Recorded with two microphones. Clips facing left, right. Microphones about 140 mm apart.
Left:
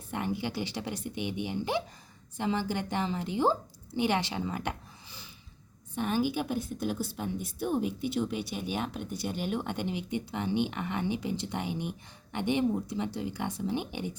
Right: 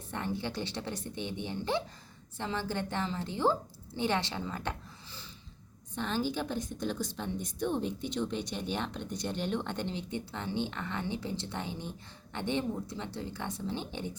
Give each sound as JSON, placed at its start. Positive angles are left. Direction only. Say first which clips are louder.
{"t": 0.1, "sound": "a woman's voice", "louder": "left 3 dB", "side_deg": 15}